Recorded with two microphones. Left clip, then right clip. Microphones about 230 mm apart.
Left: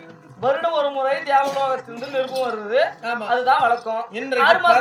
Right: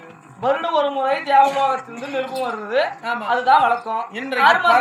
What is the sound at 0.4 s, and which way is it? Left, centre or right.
A woman's voice, centre.